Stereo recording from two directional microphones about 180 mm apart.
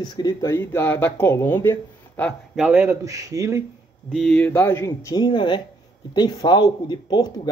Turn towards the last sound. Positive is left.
turn(degrees=25)  # may be behind; listen again after turning